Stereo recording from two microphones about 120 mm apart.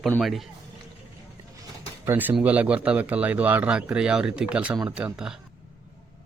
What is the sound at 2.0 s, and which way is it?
A man's voice, 15° right (ahead or behind).